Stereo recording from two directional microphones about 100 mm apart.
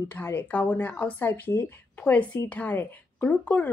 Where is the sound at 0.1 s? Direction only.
15° left (ahead or behind).